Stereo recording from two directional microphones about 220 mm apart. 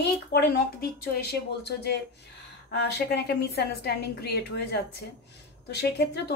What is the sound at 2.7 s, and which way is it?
A woman's voice, 50° left (ahead or behind).